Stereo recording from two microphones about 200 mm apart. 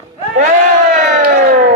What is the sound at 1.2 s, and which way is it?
Siren, 45° right (ahead or behind).